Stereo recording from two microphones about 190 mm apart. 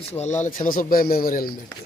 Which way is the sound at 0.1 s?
35° left (ahead or behind).